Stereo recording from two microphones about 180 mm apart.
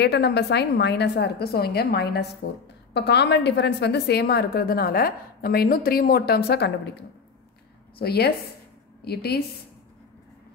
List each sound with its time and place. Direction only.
0.0 s a woman's voice: 65° left (ahead or behind)